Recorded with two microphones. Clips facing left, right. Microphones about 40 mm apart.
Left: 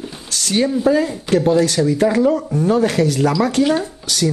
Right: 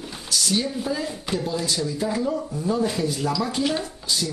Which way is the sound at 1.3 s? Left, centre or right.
Centre.